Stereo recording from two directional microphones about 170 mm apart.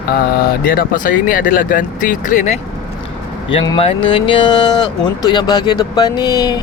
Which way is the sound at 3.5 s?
30° left (ahead or behind).